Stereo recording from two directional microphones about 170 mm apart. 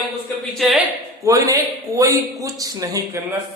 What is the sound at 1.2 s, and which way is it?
A man's voice, 20° right (ahead or behind).